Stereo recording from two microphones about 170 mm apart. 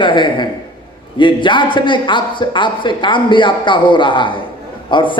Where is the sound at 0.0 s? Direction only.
30° left (ahead or behind).